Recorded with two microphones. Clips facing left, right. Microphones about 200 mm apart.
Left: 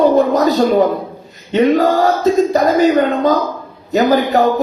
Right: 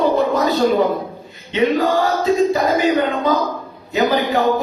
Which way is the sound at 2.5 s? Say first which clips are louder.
Left 4 dB; 40° left (ahead or behind).